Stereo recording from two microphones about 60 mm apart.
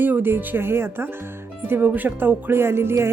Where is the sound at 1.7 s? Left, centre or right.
Right.